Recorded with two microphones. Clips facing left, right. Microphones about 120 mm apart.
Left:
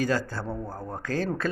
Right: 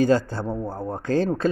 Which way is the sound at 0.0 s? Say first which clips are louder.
Right 7 dB; 25° right (ahead or behind).